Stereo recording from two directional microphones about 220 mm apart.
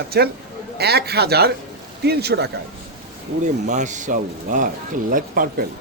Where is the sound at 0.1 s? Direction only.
45° right (ahead or behind).